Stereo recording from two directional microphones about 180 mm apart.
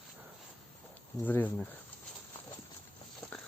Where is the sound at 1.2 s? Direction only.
10° left (ahead or behind).